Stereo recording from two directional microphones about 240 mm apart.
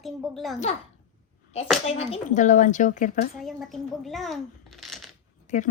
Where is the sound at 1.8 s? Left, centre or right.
Left.